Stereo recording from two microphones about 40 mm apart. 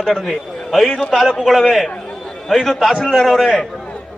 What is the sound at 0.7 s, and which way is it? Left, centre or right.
A man's voice, centre.